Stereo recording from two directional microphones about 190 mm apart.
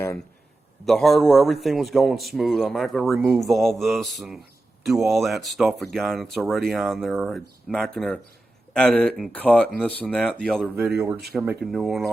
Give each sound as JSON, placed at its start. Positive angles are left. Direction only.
{"t": 0.9, "sound": "a man's voice", "side_deg": 0}
{"t": 10.9, "sound": "speech", "side_deg": -15}
{"t": 11.6, "sound": "a man's voice", "side_deg": 0}